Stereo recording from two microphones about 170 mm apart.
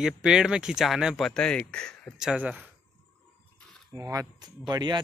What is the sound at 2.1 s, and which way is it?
Speech, 5° right (ahead or behind).